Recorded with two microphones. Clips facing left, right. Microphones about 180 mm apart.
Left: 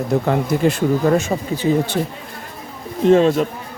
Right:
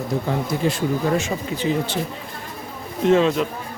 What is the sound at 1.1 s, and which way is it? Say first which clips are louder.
Speech: left 5 dB; 45° left (ahead or behind).